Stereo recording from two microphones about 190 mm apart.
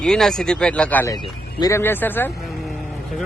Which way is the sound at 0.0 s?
Centre (ahead or behind).